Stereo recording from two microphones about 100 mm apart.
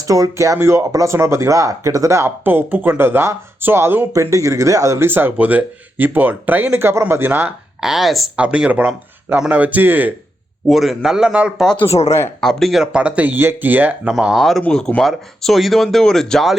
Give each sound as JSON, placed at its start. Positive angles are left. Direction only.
{"t": 0.0, "sound": "speech", "side_deg": -35}
{"t": 4.1, "sound": "speech", "side_deg": -30}
{"t": 5.0, "sound": "speech", "side_deg": -20}
{"t": 7.8, "sound": "speech", "side_deg": -5}
{"t": 8.4, "sound": "speech", "side_deg": -10}
{"t": 10.7, "sound": "speech", "side_deg": 0}
{"t": 11.9, "sound": "speech", "side_deg": 90}
{"t": 12.4, "sound": "speech", "side_deg": 5}
{"t": 14.1, "sound": "speech", "side_deg": -5}
{"t": 14.6, "sound": "speech", "side_deg": 5}